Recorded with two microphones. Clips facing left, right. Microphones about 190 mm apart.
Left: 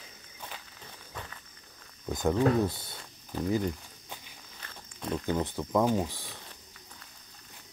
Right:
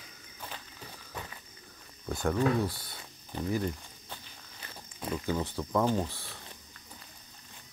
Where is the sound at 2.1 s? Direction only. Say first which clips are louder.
Left 2 dB; 15° left (ahead or behind).